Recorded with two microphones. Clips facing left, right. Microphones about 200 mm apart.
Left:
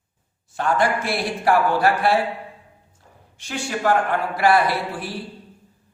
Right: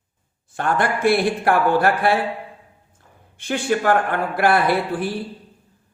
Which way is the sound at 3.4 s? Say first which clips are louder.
Right 6 dB; 55° right (ahead or behind).